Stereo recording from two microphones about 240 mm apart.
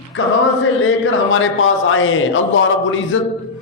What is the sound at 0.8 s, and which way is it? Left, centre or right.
A man's voice, left.